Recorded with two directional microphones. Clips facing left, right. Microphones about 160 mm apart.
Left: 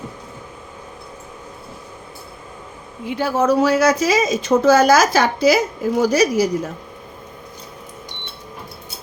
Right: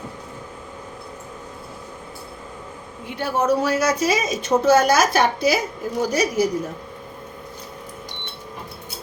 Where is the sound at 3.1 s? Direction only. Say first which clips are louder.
Left 3 dB; 90° left.